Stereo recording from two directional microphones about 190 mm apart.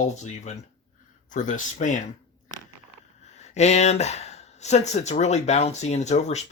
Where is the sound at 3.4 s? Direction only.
35° left (ahead or behind).